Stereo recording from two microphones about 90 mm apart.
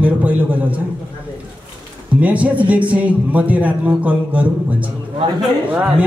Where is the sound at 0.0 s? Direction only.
15° right (ahead or behind).